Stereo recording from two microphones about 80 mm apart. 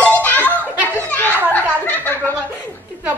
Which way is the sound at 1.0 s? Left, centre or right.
Left.